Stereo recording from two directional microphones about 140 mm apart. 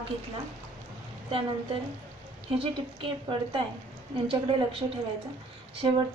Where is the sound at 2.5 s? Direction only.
40° right (ahead or behind).